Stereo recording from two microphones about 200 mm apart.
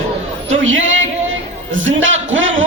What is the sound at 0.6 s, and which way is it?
A man's voice, 70° right (ahead or behind).